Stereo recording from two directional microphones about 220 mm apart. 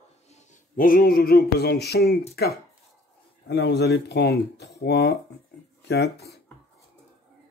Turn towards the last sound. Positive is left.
turn(degrees=45)  # may be behind; listen again after turning